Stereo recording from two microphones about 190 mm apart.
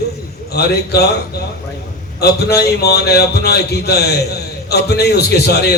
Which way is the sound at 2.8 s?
55° left (ahead or behind).